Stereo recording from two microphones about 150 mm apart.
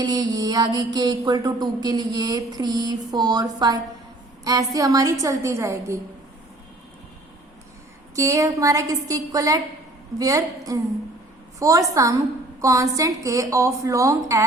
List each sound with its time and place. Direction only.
0.0 s music: 25° right (ahead or behind)
8.1 s music: 20° right (ahead or behind)